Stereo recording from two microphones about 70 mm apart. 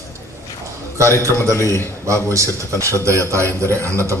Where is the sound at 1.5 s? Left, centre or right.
Left.